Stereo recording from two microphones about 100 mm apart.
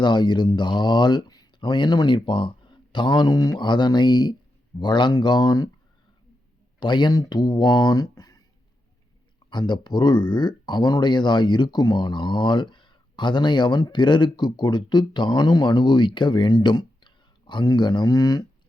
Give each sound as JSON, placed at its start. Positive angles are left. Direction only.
{"t": 0.0, "sound": "speech", "side_deg": 45}
{"t": 6.7, "sound": "speech", "side_deg": 50}
{"t": 9.5, "sound": "speech", "side_deg": 50}